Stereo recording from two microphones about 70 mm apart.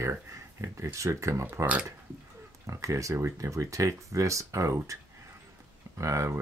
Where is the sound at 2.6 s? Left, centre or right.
Right.